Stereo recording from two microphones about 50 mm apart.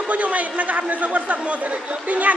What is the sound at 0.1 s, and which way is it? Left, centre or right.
A man's voice, right.